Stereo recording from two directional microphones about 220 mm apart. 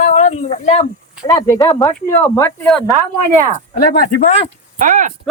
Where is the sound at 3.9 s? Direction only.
45° left (ahead or behind).